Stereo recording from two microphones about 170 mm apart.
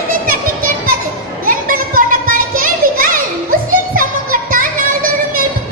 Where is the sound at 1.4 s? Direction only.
55° right (ahead or behind).